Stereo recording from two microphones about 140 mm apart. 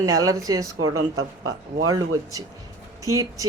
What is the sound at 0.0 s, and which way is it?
Speech, 25° right (ahead or behind).